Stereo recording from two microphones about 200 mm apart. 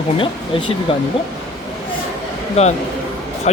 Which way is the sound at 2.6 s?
30° left (ahead or behind).